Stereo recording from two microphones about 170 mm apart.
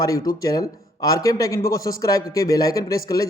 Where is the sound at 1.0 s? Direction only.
20° left (ahead or behind).